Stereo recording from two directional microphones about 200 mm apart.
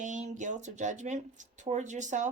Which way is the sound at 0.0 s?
40° right (ahead or behind).